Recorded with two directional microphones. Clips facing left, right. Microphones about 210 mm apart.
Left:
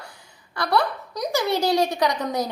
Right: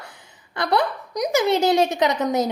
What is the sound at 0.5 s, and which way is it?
A woman's voice, 20° right (ahead or behind).